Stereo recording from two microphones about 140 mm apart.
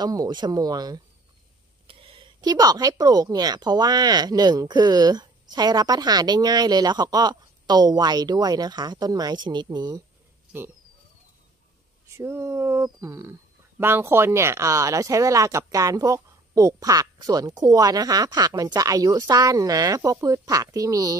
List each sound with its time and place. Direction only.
0.0 s speech: 30° right (ahead or behind)
1.9 s speech: 40° right (ahead or behind)
12.2 s speech: 20° right (ahead or behind)